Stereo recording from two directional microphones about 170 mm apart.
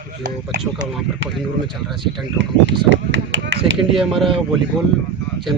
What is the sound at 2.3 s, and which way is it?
Speech, 90° right.